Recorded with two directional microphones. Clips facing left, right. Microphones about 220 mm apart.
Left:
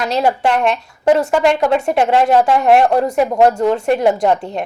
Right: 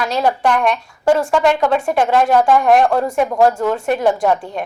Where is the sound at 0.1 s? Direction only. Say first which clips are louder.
Left 2 dB; 25° left (ahead or behind).